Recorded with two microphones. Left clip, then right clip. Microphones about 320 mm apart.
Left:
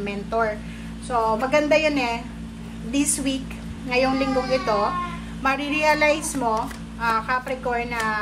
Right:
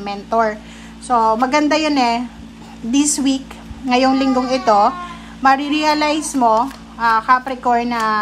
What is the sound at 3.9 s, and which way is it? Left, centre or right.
Speech, centre.